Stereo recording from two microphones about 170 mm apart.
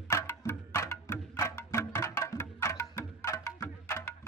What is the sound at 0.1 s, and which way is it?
Music, 15° left (ahead or behind).